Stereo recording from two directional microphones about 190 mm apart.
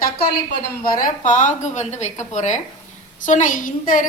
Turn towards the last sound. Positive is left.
turn(degrees=45)  # may be behind; listen again after turning